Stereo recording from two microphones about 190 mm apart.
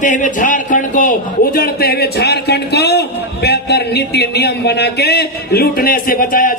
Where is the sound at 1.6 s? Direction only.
55° left (ahead or behind).